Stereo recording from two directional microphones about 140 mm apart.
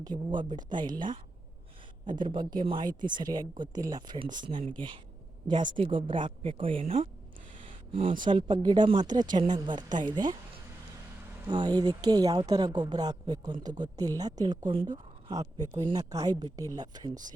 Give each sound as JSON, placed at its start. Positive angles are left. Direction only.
{"t": 0.0, "sound": "speech", "side_deg": -35}
{"t": 7.6, "sound": "a sound", "side_deg": -45}
{"t": 8.2, "sound": "speech", "side_deg": -35}
{"t": 11.4, "sound": "speech", "side_deg": -30}
{"t": 15.3, "sound": "speech", "side_deg": -25}